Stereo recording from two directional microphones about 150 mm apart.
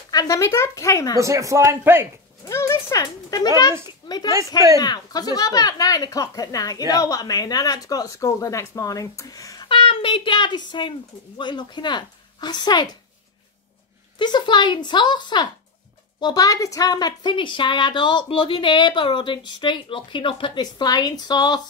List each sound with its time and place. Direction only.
0.1 s speech: 25° left (ahead or behind)
1.2 s a man's voice: 20° right (ahead or behind)
2.4 s a sound: 20° left (ahead or behind)
4.7 s speech: 25° left (ahead or behind)
9.7 s a child's voice: 35° left (ahead or behind)
14.1 s a woman's voice: 30° left (ahead or behind)